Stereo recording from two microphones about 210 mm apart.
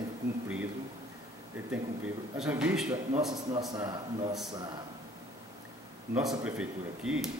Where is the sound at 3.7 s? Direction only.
20° right (ahead or behind).